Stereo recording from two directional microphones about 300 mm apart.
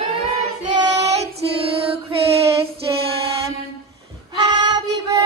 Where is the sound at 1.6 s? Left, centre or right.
Centre.